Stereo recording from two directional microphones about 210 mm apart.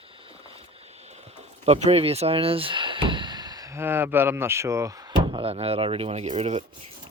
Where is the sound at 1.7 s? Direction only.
30° right (ahead or behind).